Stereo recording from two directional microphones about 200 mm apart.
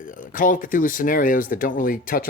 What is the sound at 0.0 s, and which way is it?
Speech, 40° left (ahead or behind).